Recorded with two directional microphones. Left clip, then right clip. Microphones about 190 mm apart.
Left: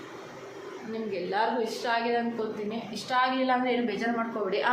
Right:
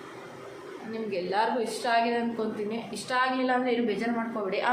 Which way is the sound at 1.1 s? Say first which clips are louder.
Right 1 dB; 20° right (ahead or behind).